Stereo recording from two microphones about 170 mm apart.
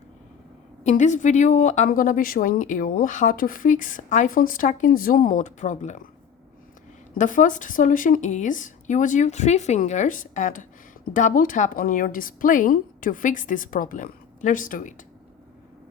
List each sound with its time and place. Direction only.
0.9 s speech: 45° left (ahead or behind)
7.2 s speech: 50° left (ahead or behind)